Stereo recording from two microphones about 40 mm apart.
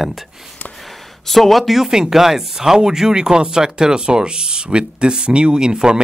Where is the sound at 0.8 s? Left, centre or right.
Centre.